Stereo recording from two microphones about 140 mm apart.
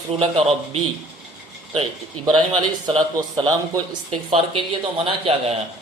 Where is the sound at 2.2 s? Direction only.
30° right (ahead or behind).